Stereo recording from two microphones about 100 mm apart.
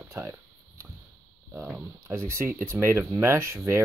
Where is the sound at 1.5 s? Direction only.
10° right (ahead or behind).